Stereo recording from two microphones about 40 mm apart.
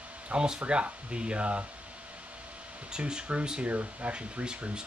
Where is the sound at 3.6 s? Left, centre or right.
Right.